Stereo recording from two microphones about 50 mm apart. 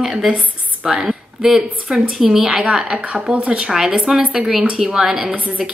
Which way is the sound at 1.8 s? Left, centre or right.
Centre.